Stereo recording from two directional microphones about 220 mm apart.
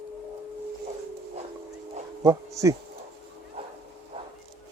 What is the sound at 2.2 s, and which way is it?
Bee, 15° right (ahead or behind).